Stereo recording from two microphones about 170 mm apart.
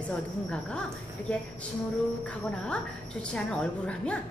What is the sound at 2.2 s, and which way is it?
A woman's voice, 5° left (ahead or behind).